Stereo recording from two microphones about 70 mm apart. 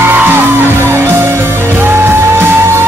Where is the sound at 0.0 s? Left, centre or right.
Right.